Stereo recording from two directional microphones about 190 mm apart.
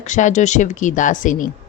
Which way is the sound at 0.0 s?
40° left (ahead or behind).